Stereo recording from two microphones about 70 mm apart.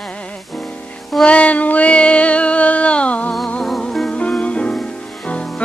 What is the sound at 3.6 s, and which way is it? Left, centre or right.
Music, centre.